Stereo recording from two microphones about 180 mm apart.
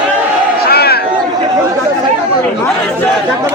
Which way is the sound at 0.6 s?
60° left (ahead or behind).